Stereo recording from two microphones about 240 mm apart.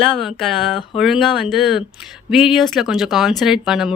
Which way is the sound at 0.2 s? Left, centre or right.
Centre.